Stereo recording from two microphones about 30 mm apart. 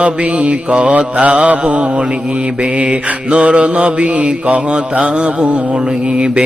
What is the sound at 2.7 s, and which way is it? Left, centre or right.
Mantra, right.